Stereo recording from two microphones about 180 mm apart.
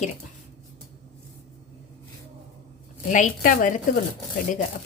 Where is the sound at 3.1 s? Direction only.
45° left (ahead or behind).